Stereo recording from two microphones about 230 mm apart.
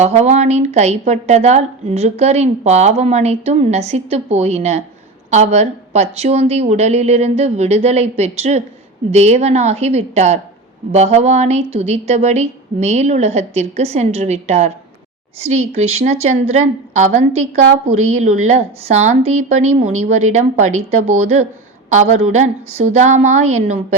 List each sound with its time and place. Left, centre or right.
0.0 s a woman's voice: right
15.7 s a woman's voice: right